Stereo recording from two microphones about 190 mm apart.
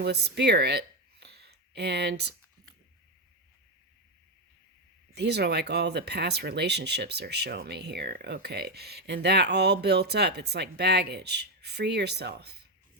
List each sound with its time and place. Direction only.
0.0 s speech: 60° right (ahead or behind)
5.1 s speech: 60° right (ahead or behind)